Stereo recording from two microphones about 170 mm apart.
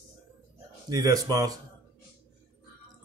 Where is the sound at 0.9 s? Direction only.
20° right (ahead or behind).